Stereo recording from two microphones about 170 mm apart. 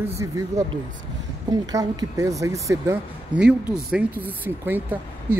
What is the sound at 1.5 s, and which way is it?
Speech, 20° right (ahead or behind).